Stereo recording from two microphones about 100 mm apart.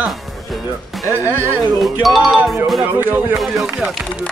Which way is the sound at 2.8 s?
20° right (ahead or behind).